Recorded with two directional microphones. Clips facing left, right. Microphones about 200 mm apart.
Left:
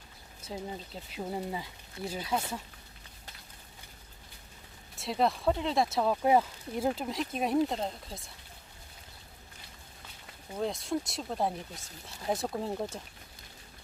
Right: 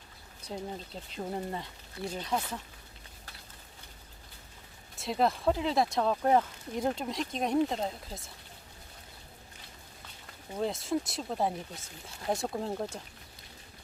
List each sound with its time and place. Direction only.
0.4 s speech: 5° left (ahead or behind)
4.9 s speech: centre (ahead or behind)
10.6 s speech: centre (ahead or behind)